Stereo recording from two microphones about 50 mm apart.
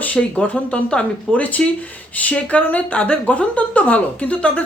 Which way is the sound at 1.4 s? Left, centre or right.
Left.